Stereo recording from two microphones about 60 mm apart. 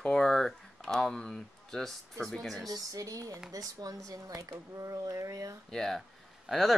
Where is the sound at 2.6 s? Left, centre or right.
Right.